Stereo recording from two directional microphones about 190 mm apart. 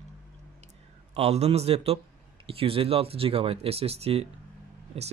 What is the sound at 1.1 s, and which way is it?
Speech, 35° right (ahead or behind).